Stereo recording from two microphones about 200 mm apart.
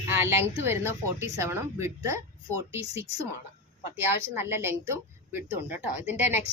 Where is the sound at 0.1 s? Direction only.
10° right (ahead or behind).